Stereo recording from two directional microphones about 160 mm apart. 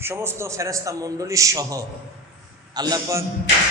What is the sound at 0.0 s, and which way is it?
A man's voice, 15° right (ahead or behind).